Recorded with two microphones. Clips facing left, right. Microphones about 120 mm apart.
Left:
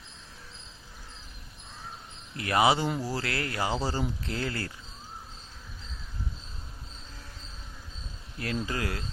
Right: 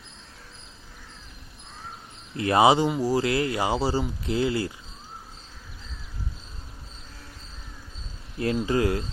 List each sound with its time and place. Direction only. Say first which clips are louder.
2.3 s speech: right 5 dB; 25° right (ahead or behind)
8.6 s speech: right 9 dB; 25° right (ahead or behind)